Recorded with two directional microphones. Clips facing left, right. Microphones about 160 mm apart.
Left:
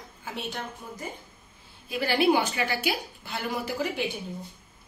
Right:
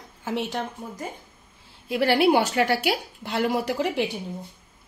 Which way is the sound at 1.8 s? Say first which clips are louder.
Right 4 dB; 75° right (ahead or behind).